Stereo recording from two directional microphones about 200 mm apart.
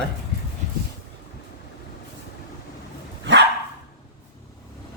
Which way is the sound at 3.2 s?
65° right (ahead or behind).